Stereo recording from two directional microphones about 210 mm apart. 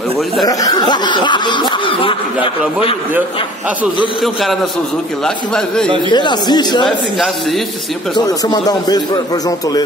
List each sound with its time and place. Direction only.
0.5 s speech: 15° left (ahead or behind)
4.2 s speech: centre (ahead or behind)
6.1 s speech: 20° left (ahead or behind)
8.1 s speech: 20° left (ahead or behind)